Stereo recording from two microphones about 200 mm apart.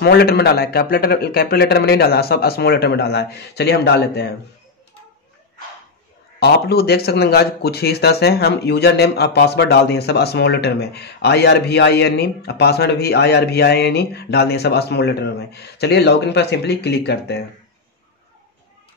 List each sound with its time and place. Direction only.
0.0 s a man's voice: 50° left (ahead or behind)
6.4 s speech: 55° left (ahead or behind)